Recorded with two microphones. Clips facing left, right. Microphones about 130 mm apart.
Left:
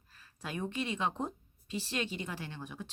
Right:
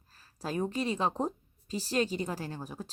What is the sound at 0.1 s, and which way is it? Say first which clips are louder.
A woman's voice: right 6 dB; 35° right (ahead or behind).